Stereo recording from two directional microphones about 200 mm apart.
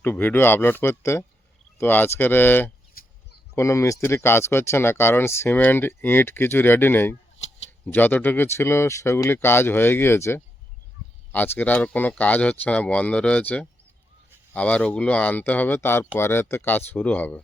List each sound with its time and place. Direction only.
0.0 s speech: 10° left (ahead or behind)
3.0 s a sound: 50° left (ahead or behind)
3.5 s speech: 15° left (ahead or behind)